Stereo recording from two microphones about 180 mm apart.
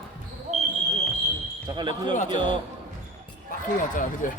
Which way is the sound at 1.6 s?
25° right (ahead or behind).